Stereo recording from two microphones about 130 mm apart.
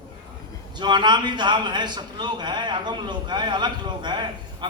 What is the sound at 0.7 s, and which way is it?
A man's voice, 35° right (ahead or behind).